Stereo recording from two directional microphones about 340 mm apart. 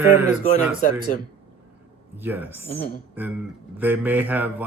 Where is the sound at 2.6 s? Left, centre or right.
Centre.